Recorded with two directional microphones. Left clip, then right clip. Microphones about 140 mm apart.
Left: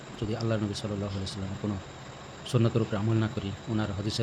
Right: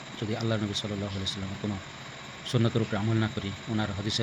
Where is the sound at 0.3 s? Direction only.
15° left (ahead or behind).